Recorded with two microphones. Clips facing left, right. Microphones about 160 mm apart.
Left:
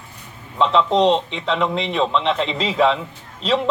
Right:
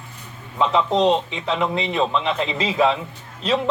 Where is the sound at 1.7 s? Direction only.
10° right (ahead or behind).